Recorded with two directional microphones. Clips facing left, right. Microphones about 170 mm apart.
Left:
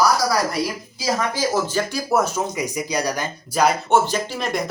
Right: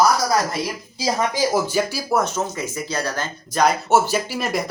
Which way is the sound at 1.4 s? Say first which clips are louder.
Right 2 dB; 10° right (ahead or behind).